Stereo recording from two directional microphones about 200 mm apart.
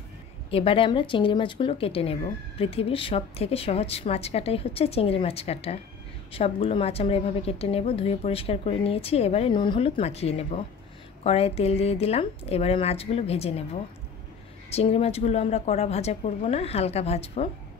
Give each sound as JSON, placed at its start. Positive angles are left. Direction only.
{"t": 0.5, "sound": "a woman's voice", "side_deg": 25}
{"t": 14.7, "sound": "a woman's voice", "side_deg": 30}